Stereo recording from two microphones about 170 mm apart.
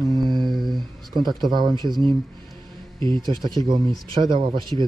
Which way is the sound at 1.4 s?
25° right (ahead or behind).